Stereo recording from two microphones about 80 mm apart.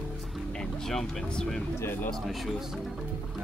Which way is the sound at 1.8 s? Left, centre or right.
Left.